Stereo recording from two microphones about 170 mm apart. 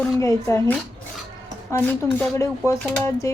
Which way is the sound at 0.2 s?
20° left (ahead or behind).